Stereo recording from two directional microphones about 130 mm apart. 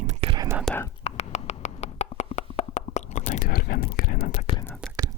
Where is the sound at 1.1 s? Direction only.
60° left (ahead or behind); by 4.5 s 80° left.